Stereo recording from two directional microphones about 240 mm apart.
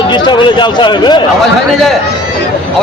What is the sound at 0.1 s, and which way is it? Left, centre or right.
Speech, centre.